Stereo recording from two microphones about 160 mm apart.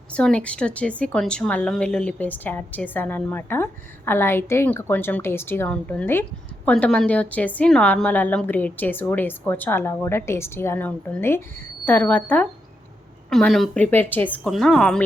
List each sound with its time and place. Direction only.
0.1 s a woman's voice: 5° left (ahead or behind)